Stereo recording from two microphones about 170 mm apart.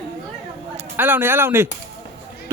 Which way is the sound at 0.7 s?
10° right (ahead or behind).